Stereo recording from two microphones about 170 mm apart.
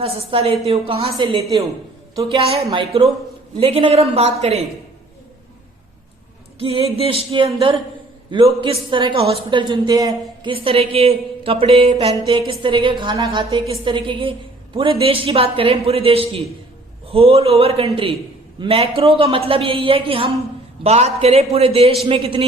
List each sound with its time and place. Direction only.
0.0 s a woman's voice: 35° right (ahead or behind)
6.6 s a woman's voice: 35° right (ahead or behind)